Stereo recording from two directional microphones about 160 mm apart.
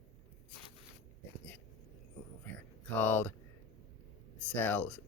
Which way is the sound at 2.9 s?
10° left (ahead or behind).